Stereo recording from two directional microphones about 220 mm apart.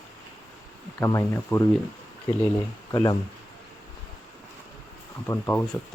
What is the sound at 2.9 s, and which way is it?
Speech, 15° left (ahead or behind).